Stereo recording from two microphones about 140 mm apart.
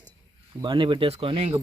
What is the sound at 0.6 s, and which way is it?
Speech, 35° right (ahead or behind).